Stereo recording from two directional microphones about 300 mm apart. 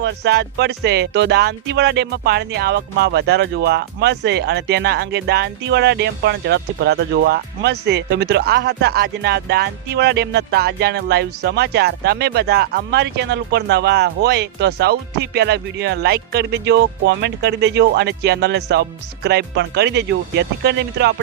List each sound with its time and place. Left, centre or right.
0.0 s speech: right